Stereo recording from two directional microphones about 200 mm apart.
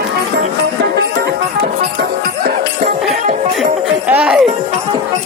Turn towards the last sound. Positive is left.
turn(degrees=-5)  # may be behind; listen again after turning